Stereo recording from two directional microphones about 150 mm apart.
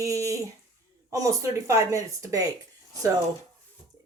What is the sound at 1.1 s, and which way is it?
Speech, 20° right (ahead or behind).